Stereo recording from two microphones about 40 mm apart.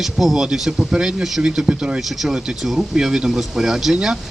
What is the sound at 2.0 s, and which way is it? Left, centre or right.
Speech, centre.